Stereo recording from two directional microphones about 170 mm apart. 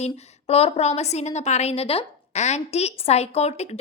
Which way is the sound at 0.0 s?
35° left (ahead or behind).